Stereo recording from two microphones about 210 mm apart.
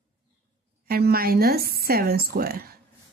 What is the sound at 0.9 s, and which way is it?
Speech, 45° right (ahead or behind).